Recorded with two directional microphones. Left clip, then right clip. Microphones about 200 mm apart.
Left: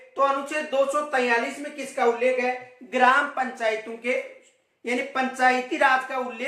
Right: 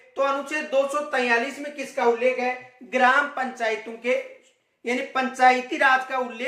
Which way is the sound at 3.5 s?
15° right (ahead or behind).